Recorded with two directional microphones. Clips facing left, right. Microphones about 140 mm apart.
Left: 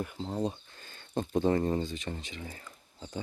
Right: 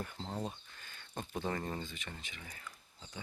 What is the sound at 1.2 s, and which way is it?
Speech, 25° left (ahead or behind).